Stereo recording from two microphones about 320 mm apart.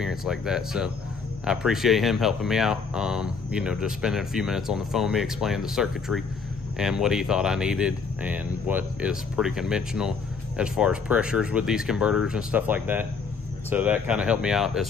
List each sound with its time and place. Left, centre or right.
0.0 s speech: centre